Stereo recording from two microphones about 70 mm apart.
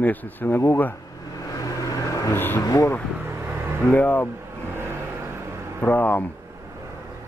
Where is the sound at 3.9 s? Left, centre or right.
Left.